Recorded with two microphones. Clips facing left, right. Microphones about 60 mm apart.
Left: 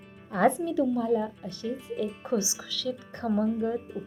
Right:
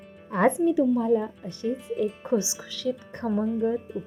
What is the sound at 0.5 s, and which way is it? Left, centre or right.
A woman's voice, centre.